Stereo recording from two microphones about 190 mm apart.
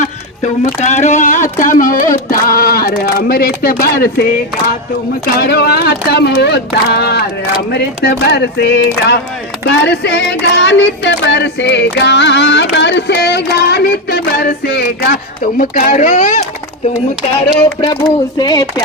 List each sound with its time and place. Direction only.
0.0 s speech: 40° left (ahead or behind)
5.4 s a sound: 55° left (ahead or behind); by 16.5 s 40° left (ahead or behind)
17.7 s speech: 25° left (ahead or behind)